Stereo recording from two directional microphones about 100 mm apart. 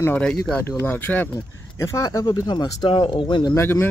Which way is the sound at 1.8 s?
30° left (ahead or behind).